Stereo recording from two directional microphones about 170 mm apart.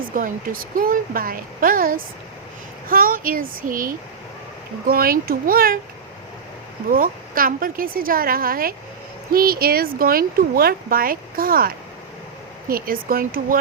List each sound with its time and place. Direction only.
0.1 s speech: 55° right (ahead or behind)
6.9 s speech: 55° right (ahead or behind)